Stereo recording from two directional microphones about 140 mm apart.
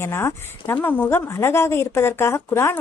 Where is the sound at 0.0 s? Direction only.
20° left (ahead or behind).